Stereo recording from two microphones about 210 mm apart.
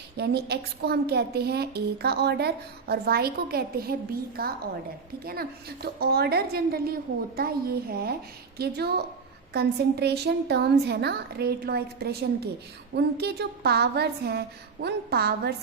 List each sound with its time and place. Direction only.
0.2 s a woman's voice: 50° right (ahead or behind)